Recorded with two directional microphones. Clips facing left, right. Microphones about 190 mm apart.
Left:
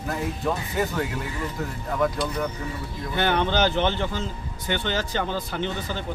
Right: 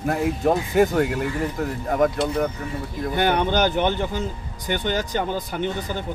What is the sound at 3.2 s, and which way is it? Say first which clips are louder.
Speech: right 2 dB; 15° right (ahead or behind).